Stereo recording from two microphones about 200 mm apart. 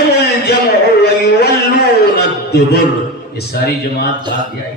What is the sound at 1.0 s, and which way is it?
A man's voice, 50° left (ahead or behind).